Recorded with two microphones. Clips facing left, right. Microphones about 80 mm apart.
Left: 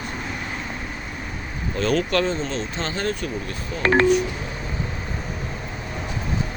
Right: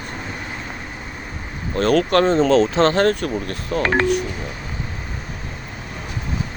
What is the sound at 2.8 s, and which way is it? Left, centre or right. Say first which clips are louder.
Speech: right 10 dB; right.